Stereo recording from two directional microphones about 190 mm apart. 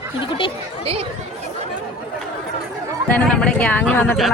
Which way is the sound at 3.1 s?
5° left (ahead or behind).